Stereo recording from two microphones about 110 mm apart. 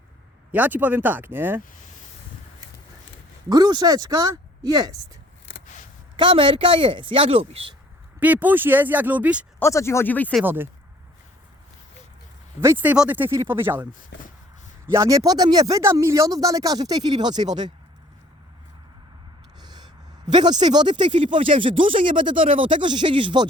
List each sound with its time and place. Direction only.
0.5 s speech: 15° right (ahead or behind)
3.5 s speech: 45° right (ahead or behind)
6.1 s speech: 50° right (ahead or behind)
8.2 s speech: 15° right (ahead or behind)
9.6 s speech: 25° left (ahead or behind)
10.4 s speech: 20° right (ahead or behind)
12.5 s speech: 20° right (ahead or behind)
14.9 s speech: 30° right (ahead or behind)
19.5 s a sound: 40° right (ahead or behind)
20.2 s speech: 40° right (ahead or behind)